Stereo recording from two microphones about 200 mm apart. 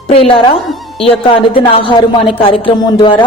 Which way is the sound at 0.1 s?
25° left (ahead or behind).